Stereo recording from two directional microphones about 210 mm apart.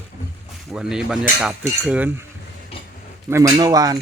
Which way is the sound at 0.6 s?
5° right (ahead or behind).